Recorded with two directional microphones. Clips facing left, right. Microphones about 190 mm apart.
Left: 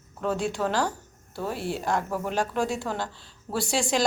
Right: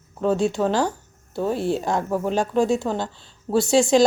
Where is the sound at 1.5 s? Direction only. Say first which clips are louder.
Right 8 dB; 5° left (ahead or behind).